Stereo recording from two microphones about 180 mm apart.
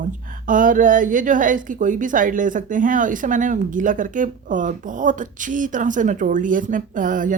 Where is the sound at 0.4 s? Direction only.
50° right (ahead or behind).